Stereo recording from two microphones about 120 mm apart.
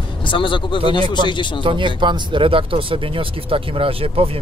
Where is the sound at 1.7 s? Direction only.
40° right (ahead or behind).